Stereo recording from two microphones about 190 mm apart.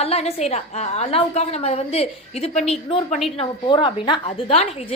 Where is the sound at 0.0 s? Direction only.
35° left (ahead or behind).